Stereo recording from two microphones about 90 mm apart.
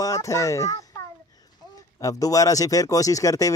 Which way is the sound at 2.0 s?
40° left (ahead or behind).